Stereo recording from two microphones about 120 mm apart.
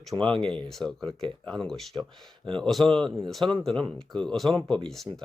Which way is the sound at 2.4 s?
45° right (ahead or behind).